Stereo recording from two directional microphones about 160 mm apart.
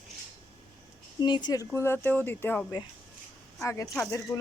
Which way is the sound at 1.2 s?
25° left (ahead or behind).